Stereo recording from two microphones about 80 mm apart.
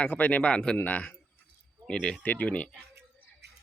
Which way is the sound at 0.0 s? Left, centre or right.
Centre.